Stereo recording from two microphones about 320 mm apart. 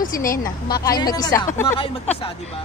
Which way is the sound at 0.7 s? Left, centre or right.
Centre.